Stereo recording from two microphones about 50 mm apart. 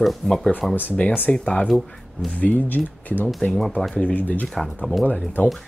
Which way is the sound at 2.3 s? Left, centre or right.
Left.